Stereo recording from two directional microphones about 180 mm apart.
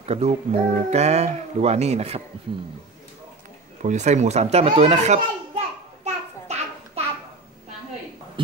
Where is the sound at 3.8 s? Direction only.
40° right (ahead or behind).